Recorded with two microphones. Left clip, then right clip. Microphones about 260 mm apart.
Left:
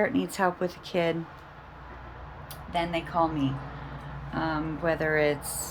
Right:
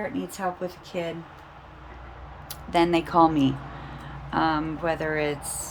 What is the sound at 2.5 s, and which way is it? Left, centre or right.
Speech, centre.